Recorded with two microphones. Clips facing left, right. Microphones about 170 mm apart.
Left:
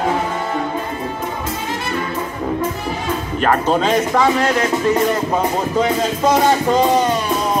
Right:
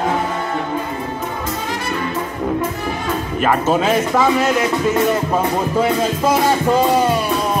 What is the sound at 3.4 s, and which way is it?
Speech, 5° right (ahead or behind).